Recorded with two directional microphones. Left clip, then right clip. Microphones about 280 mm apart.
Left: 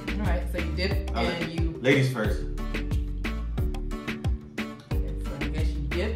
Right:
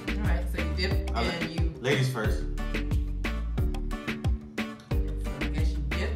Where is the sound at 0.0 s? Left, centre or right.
Centre.